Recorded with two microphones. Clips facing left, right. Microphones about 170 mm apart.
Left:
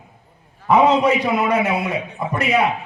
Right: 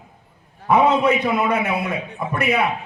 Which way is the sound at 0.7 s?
55° right (ahead or behind).